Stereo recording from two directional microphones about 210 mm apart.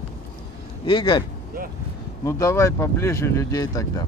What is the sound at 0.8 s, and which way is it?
Speech, 20° left (ahead or behind).